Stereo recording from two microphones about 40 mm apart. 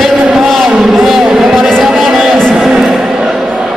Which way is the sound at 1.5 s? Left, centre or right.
Centre.